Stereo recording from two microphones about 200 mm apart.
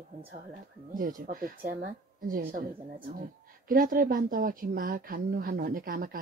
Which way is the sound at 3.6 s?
45° right (ahead or behind).